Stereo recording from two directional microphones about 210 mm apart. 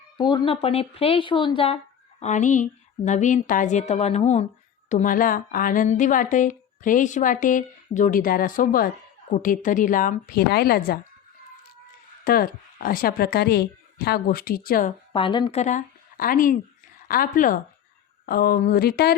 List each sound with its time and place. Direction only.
0.2 s speech: 20° left (ahead or behind); by 11.0 s 45° left (ahead or behind)
12.2 s a woman's voice: 45° left (ahead or behind)
15.1 s a woman's voice: 25° left (ahead or behind); by 19.1 s 50° left (ahead or behind)